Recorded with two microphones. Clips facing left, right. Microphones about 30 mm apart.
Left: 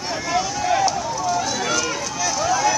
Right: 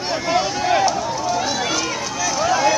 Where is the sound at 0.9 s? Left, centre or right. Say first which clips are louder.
Right 1 dB; right.